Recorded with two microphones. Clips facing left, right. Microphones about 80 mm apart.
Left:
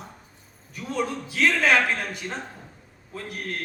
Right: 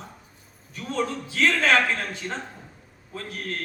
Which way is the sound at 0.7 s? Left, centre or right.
Centre.